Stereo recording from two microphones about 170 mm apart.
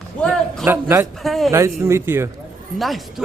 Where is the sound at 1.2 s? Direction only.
Centre (ahead or behind).